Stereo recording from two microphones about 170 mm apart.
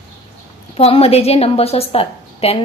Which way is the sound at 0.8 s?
35° left (ahead or behind).